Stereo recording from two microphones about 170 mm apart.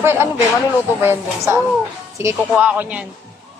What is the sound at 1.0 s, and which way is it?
Speech, 15° right (ahead or behind).